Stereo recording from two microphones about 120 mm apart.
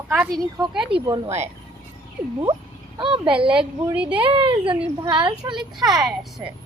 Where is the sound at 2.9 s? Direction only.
45° right (ahead or behind).